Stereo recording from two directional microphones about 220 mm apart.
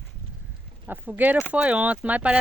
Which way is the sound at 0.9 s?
10° right (ahead or behind).